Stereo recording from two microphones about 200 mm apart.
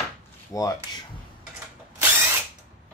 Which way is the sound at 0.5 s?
15° left (ahead or behind).